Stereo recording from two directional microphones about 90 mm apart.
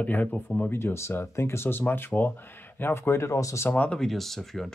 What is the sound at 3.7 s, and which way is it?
Speech, 15° left (ahead or behind).